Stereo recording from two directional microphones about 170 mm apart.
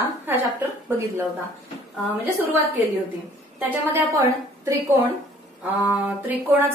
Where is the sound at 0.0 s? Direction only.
10° right (ahead or behind).